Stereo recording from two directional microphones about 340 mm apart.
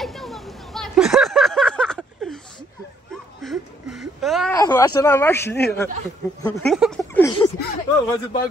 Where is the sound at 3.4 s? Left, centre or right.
Centre.